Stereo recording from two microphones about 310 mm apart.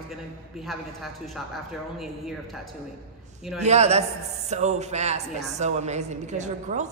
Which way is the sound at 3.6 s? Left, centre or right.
Right.